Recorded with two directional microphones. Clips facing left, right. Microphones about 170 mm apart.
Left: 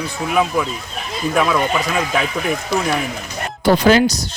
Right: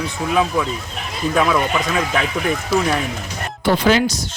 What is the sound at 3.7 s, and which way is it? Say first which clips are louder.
Speech: left 3 dB; 40° left (ahead or behind).